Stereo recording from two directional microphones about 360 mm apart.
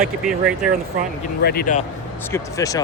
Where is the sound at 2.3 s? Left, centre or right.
Centre.